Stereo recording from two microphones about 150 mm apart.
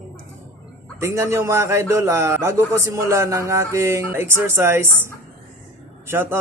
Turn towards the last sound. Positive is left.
turn(degrees=-15)  # may be behind; listen again after turning